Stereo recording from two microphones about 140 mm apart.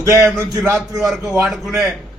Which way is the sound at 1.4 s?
Centre (ahead or behind).